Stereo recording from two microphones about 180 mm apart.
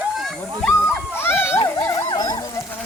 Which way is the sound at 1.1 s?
15° left (ahead or behind).